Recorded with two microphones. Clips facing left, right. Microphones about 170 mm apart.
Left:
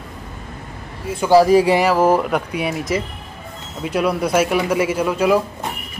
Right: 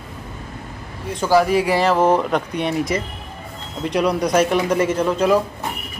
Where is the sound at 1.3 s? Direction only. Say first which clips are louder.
Left 4 dB; 35° left (ahead or behind).